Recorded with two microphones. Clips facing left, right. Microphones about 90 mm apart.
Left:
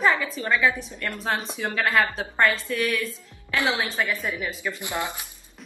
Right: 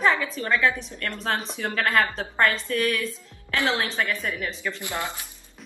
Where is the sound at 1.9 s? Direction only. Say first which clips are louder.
Even; 5° left (ahead or behind).